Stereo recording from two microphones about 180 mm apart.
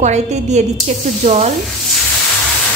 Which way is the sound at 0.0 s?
40° right (ahead or behind).